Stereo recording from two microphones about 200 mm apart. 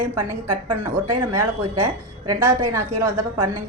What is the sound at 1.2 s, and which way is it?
A woman's voice, 15° right (ahead or behind).